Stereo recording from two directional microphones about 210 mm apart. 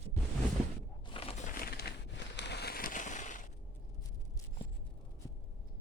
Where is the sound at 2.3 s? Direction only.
55° left (ahead or behind); by 3.4 s 35° left (ahead or behind).